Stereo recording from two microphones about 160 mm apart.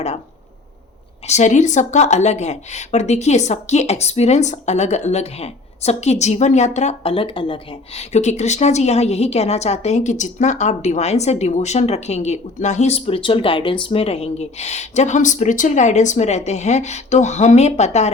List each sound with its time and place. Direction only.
1.3 s speech: 45° left (ahead or behind)